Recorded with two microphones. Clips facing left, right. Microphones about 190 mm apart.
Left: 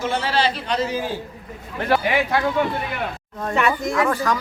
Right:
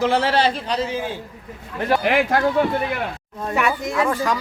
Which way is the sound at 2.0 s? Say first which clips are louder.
Right 2 dB; 50° right (ahead or behind).